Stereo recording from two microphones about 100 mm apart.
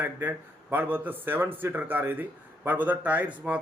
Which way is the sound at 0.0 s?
20° right (ahead or behind).